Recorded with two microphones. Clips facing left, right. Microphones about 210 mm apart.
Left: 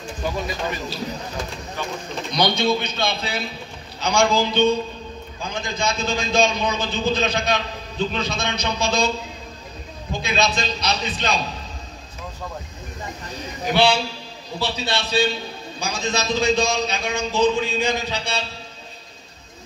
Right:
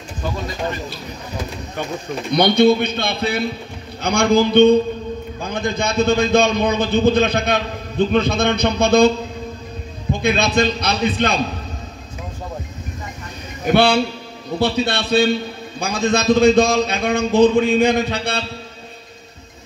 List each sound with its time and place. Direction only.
2.3 s a man's voice: 55° right (ahead or behind)
10.2 s a man's voice: 55° right (ahead or behind)
13.7 s a man's voice: 55° right (ahead or behind)